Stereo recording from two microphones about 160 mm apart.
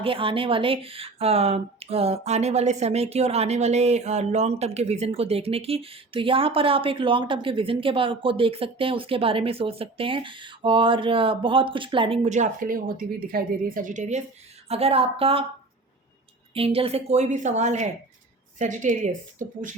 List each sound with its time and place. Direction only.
0.0 s speech: 35° right (ahead or behind); by 14.2 s 50° right (ahead or behind)
14.7 s speech: 40° right (ahead or behind)
16.6 s a woman's voice: 35° right (ahead or behind)